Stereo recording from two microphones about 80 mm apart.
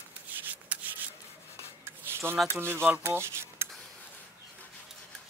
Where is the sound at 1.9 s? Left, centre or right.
Right.